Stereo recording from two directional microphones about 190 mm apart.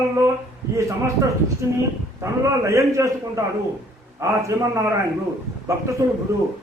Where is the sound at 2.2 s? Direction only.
15° right (ahead or behind).